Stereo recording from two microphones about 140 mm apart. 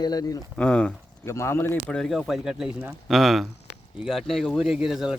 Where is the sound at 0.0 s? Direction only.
30° left (ahead or behind).